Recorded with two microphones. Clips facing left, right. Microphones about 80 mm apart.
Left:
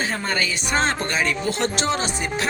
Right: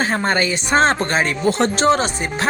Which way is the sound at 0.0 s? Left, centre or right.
Right.